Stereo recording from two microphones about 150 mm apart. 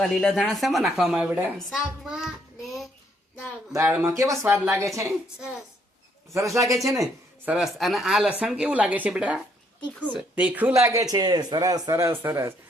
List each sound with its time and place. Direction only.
0.0 s speech: 5° left (ahead or behind)
3.7 s speech: 15° right (ahead or behind)
6.3 s speech: 20° right (ahead or behind)
7.4 s speech: 5° right (ahead or behind)